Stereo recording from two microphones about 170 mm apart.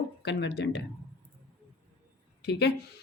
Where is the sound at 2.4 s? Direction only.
75° left (ahead or behind).